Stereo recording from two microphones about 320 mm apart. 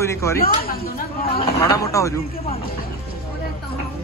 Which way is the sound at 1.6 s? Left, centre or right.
Centre.